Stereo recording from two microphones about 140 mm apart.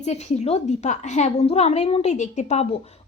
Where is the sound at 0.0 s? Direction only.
55° left (ahead or behind).